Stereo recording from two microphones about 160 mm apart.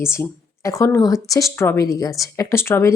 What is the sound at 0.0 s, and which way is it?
Speech, 15° left (ahead or behind).